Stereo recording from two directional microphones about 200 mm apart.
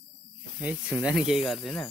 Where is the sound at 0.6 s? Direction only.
5° right (ahead or behind).